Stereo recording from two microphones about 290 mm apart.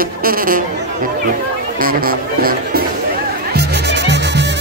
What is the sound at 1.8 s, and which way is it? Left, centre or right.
Music, right.